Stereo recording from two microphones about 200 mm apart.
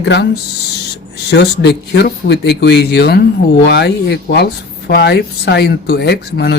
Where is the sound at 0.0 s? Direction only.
55° left (ahead or behind).